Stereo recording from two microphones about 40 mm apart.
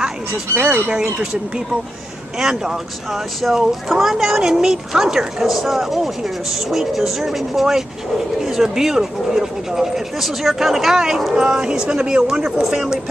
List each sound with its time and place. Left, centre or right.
2.3 s speech: centre
3.3 s speech: centre